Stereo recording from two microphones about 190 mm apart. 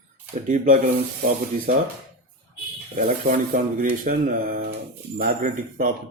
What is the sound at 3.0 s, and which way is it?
Speech, 50° right (ahead or behind).